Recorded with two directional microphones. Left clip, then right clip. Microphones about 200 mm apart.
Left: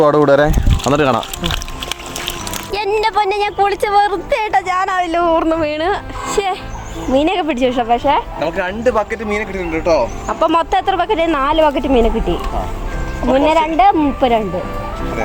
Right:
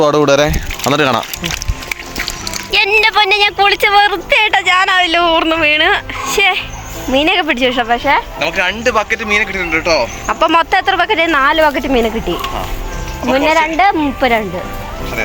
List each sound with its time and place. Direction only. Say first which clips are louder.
0.0 s speech: even; 5° right (ahead or behind)
2.7 s speech: right 5 dB; 5° left (ahead or behind)
8.4 s speech: right 4 dB; 30° left (ahead or behind)
10.4 s speech: right 3 dB; 5° right (ahead or behind)